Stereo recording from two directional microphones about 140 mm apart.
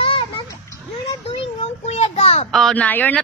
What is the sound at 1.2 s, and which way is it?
A child's voice, 50° left (ahead or behind).